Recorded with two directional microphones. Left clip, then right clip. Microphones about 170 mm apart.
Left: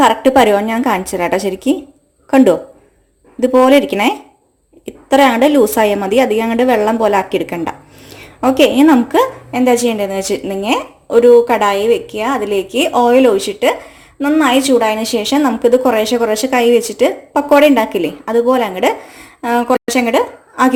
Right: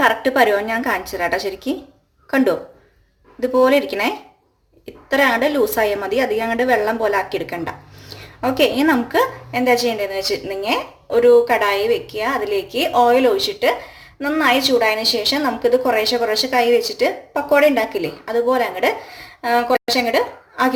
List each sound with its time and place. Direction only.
0.0 s a woman's voice: 35° left (ahead or behind)